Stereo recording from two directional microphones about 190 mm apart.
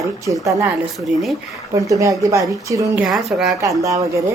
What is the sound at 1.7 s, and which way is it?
Speech, 15° right (ahead or behind).